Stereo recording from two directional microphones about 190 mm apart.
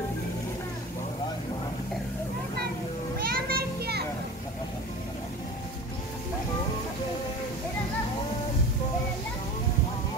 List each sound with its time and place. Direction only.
3.2 s children playing: 50° right (ahead or behind)